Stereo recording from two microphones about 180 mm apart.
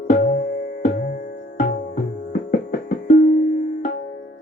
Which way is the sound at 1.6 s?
50° left (ahead or behind).